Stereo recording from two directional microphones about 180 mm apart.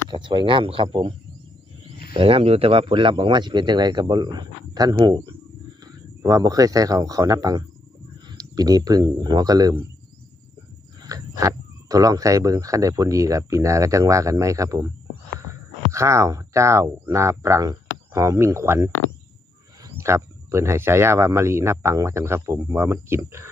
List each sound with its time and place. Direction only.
0.1 s a man's voice: 25° right (ahead or behind)
2.1 s a man's voice: 30° right (ahead or behind)
11.0 s speech: 20° right (ahead or behind)
15.9 s speech: 15° right (ahead or behind)